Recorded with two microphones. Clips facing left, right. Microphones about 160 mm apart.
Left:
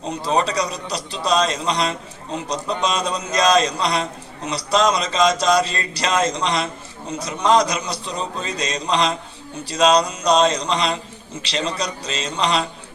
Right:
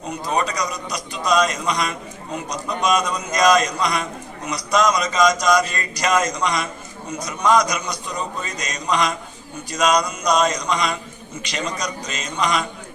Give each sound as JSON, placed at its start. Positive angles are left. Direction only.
{"t": 0.1, "sound": "a man's voice", "side_deg": 30}